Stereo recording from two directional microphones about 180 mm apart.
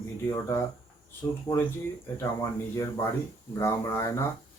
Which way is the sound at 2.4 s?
15° left (ahead or behind).